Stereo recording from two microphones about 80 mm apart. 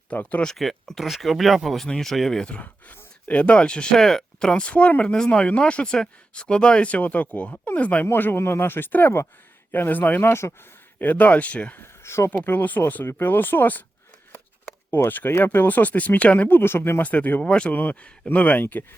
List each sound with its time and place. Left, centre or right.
0.1 s speech: centre
0.4 s speech: centre; by 10.5 s left
11.0 s speech: left
12.0 s speech: left
12.3 s speech: left
14.8 s speech: left